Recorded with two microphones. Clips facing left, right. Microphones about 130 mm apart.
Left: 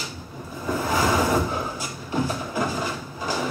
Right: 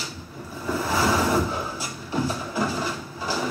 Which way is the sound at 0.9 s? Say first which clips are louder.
Even; 15° left (ahead or behind).